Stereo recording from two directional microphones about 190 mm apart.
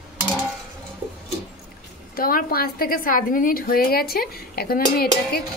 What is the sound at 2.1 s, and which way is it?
A woman's voice, 50° left (ahead or behind).